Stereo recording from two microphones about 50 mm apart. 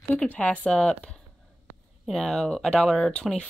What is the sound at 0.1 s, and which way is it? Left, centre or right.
Speech, left.